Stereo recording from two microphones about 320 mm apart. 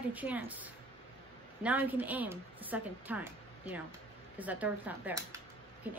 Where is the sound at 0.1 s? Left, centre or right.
Centre.